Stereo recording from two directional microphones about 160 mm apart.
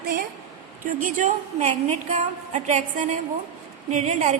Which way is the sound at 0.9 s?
55° right (ahead or behind).